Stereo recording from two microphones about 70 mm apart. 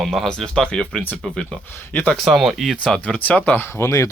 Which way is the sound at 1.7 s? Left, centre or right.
Left.